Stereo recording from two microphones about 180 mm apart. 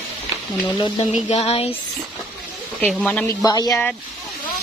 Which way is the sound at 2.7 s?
5° left (ahead or behind).